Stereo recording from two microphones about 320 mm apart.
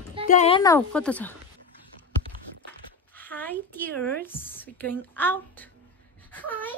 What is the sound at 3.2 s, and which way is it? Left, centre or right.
A woman's voice, centre.